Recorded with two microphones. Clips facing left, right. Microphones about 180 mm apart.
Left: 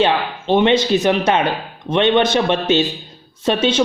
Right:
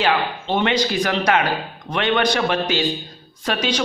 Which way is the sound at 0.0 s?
20° left (ahead or behind).